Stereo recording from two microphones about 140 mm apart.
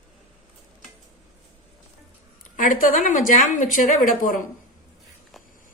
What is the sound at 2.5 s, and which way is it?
Speech, 70° left (ahead or behind).